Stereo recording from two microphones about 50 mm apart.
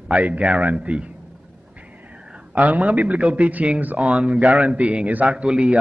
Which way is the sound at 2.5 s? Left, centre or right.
Right.